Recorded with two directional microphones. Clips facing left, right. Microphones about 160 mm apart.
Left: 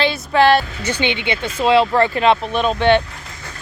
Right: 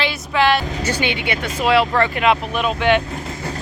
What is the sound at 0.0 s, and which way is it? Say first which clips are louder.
Vehicle: left 4 dB; 30° left (ahead or behind).